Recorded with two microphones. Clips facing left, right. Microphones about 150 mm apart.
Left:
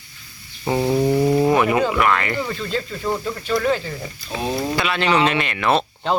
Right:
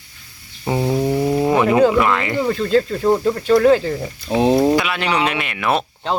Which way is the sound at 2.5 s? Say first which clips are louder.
Right 9 dB; 45° right (ahead or behind).